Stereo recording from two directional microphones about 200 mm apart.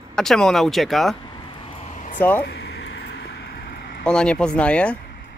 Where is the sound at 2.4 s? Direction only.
55° left (ahead or behind).